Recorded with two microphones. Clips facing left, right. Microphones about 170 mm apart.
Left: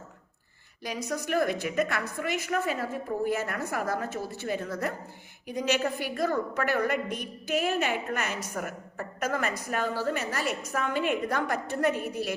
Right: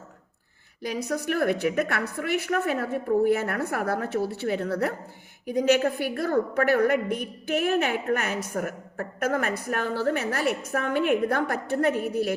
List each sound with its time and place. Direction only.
0.8 s a woman's voice: 55° right (ahead or behind)
5.5 s a woman's voice: 50° right (ahead or behind)